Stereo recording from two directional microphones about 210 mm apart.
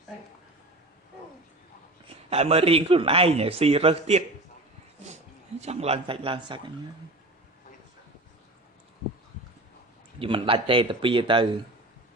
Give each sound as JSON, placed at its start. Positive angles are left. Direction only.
{"t": 2.3, "sound": "a man's voice", "side_deg": -30}
{"t": 5.5, "sound": "a man's voice", "side_deg": -30}
{"t": 10.2, "sound": "a man's voice", "side_deg": -25}